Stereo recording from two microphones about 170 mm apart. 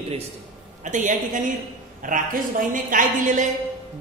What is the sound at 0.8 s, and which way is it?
A woman's voice, 45° right (ahead or behind).